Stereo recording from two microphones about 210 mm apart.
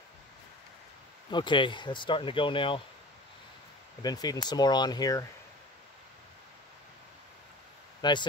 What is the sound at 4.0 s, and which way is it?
Speech, 20° left (ahead or behind).